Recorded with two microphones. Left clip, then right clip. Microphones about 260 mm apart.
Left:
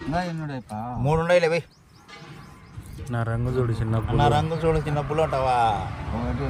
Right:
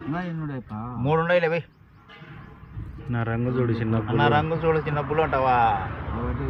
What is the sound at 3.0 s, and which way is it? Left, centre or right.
Speech, left.